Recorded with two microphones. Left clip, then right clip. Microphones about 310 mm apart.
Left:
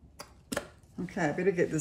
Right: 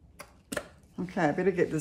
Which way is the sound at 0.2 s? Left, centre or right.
Centre.